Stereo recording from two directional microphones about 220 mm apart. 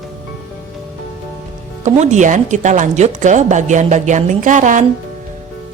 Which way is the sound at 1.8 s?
30° right (ahead or behind).